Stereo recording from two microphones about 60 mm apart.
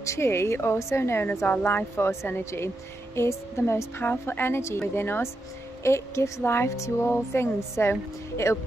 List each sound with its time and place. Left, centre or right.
0.0 s speech: left
1.5 s a woman's voice: left
4.0 s a woman's voice: left
5.9 s speech: left
6.4 s a woman's voice: left